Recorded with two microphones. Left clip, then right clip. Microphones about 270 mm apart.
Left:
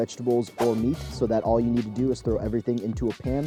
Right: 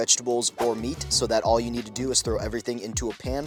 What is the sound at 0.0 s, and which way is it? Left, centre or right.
Speech, centre.